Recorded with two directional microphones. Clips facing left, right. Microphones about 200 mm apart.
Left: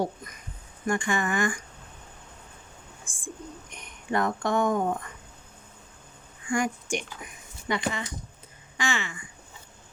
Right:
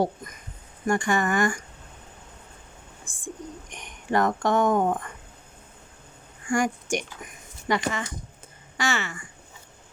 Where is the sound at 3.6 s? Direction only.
90° right.